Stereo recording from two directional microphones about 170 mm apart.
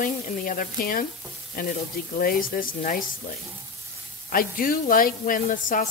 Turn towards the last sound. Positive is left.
turn(degrees=50)  # may be behind; listen again after turning